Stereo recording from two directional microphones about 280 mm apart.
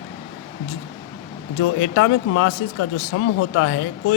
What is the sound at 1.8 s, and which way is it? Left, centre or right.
Speech, left.